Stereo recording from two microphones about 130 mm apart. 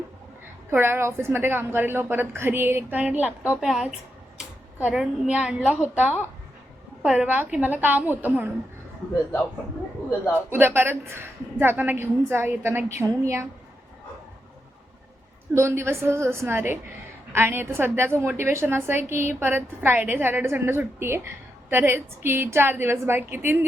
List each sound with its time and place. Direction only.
0.7 s a woman's voice: 15° right (ahead or behind)
10.5 s a woman's voice: 15° right (ahead or behind)
15.5 s a woman's voice: 20° right (ahead or behind)